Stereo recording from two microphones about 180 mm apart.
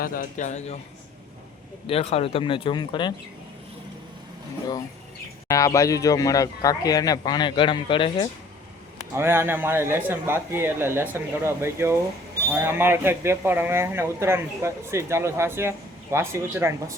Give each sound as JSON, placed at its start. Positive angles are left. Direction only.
{"t": 0.0, "sound": "a man's voice", "side_deg": 50}
{"t": 1.9, "sound": "speech", "side_deg": 35}
{"t": 5.5, "sound": "speech", "side_deg": 20}
{"t": 9.1, "sound": "speech", "side_deg": -15}